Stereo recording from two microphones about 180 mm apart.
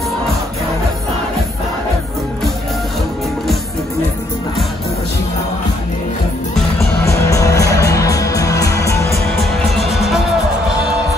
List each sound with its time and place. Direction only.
7.1 s music: 20° left (ahead or behind)
9.8 s music: centre (ahead or behind)